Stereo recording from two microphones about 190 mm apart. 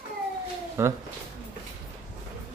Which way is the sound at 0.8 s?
15° right (ahead or behind).